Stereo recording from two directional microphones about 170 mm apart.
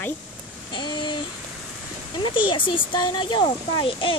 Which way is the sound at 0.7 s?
25° left (ahead or behind).